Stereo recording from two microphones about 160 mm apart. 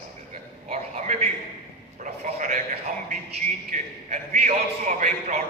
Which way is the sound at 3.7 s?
45° right (ahead or behind).